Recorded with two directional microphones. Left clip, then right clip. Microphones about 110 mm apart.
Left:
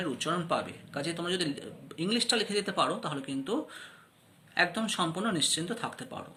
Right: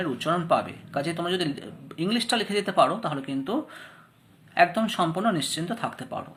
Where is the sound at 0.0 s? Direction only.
30° left (ahead or behind).